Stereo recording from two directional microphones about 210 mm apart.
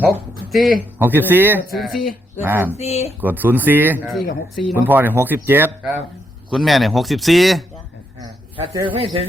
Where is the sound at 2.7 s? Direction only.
30° left (ahead or behind).